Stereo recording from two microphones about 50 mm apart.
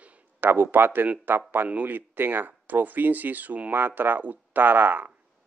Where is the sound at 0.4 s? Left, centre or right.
Right.